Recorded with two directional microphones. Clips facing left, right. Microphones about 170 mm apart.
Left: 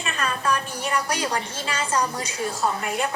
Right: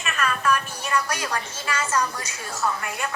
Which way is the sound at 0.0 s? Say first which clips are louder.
Right 1 dB; 30° left (ahead or behind).